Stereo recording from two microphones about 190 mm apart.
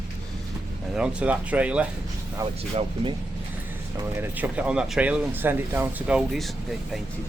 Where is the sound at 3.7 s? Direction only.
15° right (ahead or behind).